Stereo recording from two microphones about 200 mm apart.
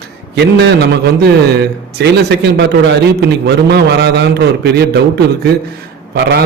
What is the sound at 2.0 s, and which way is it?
A man's voice, 55° right (ahead or behind).